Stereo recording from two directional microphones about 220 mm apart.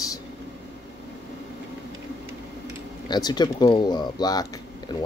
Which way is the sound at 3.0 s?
20° left (ahead or behind).